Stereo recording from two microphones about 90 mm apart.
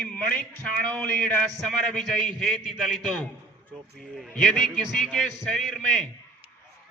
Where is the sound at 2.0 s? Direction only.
5° left (ahead or behind).